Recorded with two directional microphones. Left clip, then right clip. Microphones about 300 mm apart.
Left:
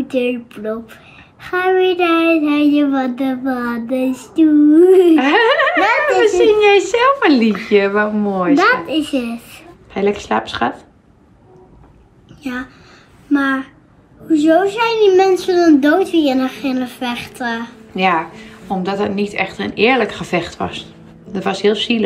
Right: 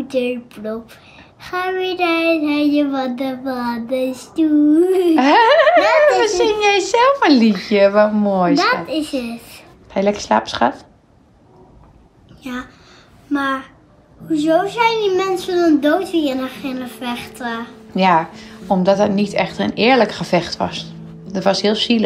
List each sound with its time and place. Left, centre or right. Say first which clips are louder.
0.1 s speech: left 1 dB; centre
4.0 s female singing: left 1 dB; right
4.7 s speech: left 5 dB; centre
13.3 s speech: left 3 dB; centre